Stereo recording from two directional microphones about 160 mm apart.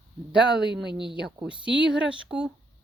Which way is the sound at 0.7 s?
90° right.